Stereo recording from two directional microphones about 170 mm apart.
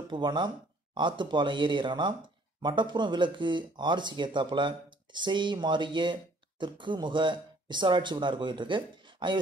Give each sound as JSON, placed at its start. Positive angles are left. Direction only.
{"t": 0.1, "sound": "speech", "side_deg": -25}